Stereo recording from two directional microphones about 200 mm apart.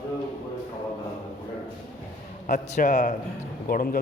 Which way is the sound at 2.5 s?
40° left (ahead or behind).